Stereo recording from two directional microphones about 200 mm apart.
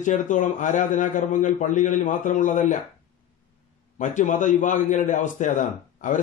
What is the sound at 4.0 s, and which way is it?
A man's voice, 40° left (ahead or behind).